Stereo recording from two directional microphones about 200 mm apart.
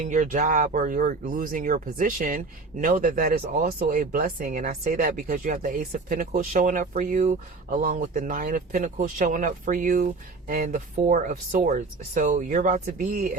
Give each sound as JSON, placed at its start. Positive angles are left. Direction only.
{"t": 0.0, "sound": "speech", "side_deg": -40}